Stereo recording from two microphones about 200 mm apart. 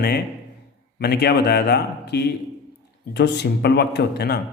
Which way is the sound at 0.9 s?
55° left (ahead or behind).